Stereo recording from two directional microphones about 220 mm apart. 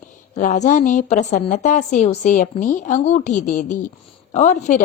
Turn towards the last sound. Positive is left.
turn(degrees=30)  # may be behind; listen again after turning